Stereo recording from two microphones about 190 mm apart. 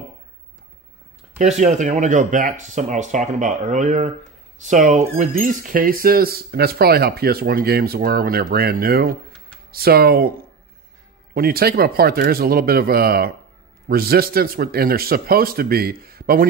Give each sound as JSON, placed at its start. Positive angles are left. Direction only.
{"t": 1.4, "sound": "speech", "side_deg": -35}
{"t": 11.3, "sound": "speech", "side_deg": -50}